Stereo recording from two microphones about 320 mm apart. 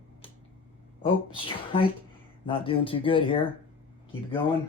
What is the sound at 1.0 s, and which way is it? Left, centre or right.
Speech, centre.